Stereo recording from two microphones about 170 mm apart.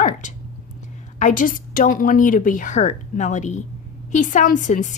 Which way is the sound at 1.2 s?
50° left (ahead or behind).